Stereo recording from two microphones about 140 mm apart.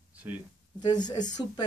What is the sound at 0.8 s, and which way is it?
Speech, 30° left (ahead or behind).